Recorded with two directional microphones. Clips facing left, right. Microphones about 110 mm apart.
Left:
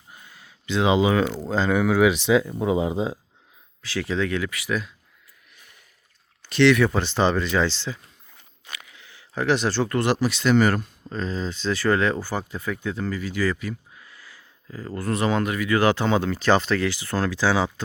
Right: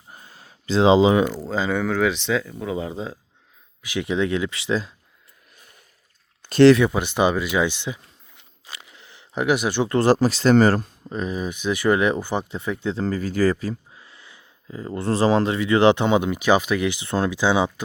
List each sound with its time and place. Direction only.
0.1 s a sound: 35° right (ahead or behind)
1.2 s speech: 10° right (ahead or behind); by 3.2 s 15° left (ahead or behind)
3.8 s speech: 20° right (ahead or behind)
6.5 s speech: 40° right (ahead or behind)
6.9 s speech: 15° right (ahead or behind)
8.7 s a sound: 25° right (ahead or behind)
9.4 s speech: 15° right (ahead or behind)
9.9 s speech: 35° right (ahead or behind)
11.1 s speech: 15° right (ahead or behind)
13.1 s speech: 40° right (ahead or behind); by 17.8 s 20° right (ahead or behind)